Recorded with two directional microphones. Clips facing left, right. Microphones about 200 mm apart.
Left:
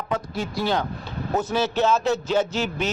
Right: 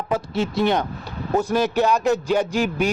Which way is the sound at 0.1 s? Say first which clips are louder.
Right 5 dB; 25° right (ahead or behind).